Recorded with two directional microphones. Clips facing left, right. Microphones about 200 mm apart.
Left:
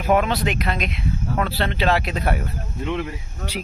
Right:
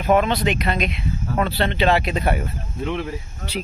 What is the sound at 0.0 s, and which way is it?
Speech, 5° left (ahead or behind).